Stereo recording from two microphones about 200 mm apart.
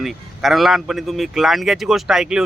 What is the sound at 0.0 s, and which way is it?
A man's voice, centre (ahead or behind).